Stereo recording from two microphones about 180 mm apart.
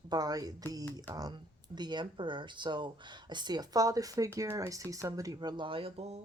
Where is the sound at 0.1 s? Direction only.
20° right (ahead or behind).